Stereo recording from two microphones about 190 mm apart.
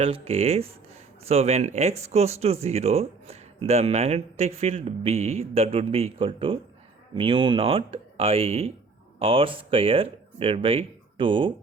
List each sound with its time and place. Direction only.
0.0 s speech: 30° right (ahead or behind)